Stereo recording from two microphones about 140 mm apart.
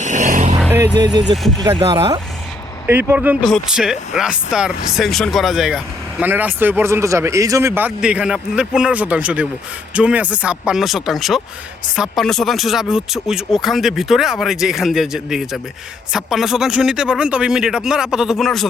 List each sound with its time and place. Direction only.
0.0 s vehicle: 60° right (ahead or behind)
0.9 s speech: 30° right (ahead or behind)
2.8 s speech: 15° right (ahead or behind); by 18.7 s centre (ahead or behind)